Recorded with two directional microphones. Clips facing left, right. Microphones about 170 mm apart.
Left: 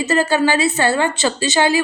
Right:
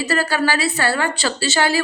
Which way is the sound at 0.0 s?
20° left (ahead or behind).